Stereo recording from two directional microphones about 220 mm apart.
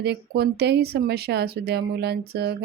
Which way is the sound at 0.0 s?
50° right (ahead or behind).